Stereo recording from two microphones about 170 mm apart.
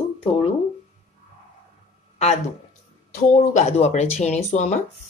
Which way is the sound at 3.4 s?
40° left (ahead or behind).